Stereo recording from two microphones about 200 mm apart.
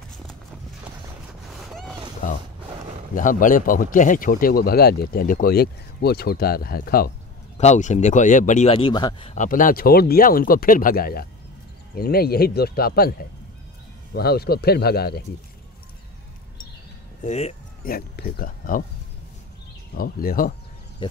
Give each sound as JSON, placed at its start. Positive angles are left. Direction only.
{"t": 1.5, "sound": "boat", "side_deg": 0}
{"t": 2.2, "sound": "speech", "side_deg": 40}
{"t": 7.5, "sound": "speech", "side_deg": 35}
{"t": 9.3, "sound": "speech", "side_deg": 40}
{"t": 17.2, "sound": "speech", "side_deg": 35}
{"t": 17.8, "sound": "speech", "side_deg": 50}
{"t": 20.0, "sound": "speech", "side_deg": 45}